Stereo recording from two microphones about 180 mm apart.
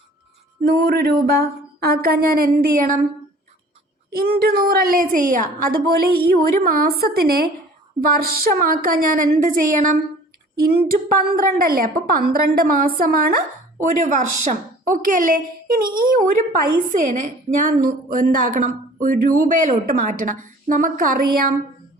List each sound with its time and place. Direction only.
0.6 s a woman's voice: 60° right (ahead or behind)
4.1 s a woman's voice: 60° right (ahead or behind)
13.9 s a woman's voice: 45° right (ahead or behind)